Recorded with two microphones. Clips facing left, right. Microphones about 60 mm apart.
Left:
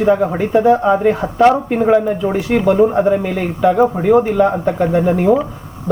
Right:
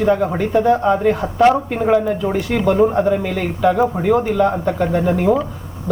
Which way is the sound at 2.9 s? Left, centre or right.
Centre.